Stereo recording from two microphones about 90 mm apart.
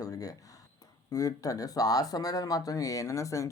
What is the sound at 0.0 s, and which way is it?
Speech, 40° left (ahead or behind).